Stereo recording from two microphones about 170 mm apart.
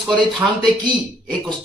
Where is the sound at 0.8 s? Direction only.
25° right (ahead or behind).